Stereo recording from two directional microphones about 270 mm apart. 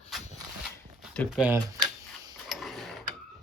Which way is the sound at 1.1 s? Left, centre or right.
Centre.